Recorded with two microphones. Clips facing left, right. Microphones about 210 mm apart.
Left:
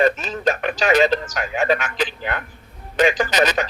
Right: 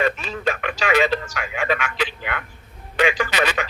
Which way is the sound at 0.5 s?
45° left (ahead or behind).